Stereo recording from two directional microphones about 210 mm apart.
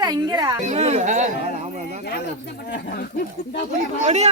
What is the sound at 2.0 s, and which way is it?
Speech, 50° left (ahead or behind).